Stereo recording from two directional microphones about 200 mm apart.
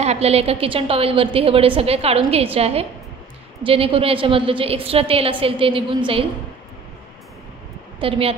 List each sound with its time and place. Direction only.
0.0 s a woman's voice: 30° right (ahead or behind)
8.0 s a woman's voice: 25° right (ahead or behind)